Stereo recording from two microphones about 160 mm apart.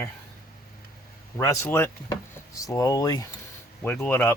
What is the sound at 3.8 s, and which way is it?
Speech, 10° left (ahead or behind).